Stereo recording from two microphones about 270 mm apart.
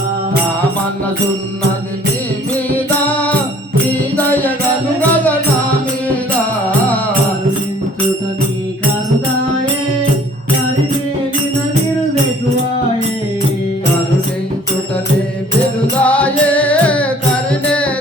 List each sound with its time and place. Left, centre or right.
2.7 s music: centre
4.9 s music: centre
16.0 s music: centre